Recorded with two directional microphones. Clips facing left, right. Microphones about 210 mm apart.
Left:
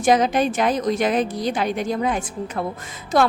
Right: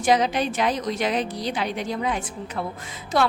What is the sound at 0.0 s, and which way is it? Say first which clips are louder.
A woman's voice: left 3 dB; 50° left (ahead or behind).